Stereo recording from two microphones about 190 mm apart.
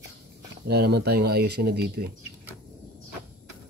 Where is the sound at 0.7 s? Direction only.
60° right (ahead or behind).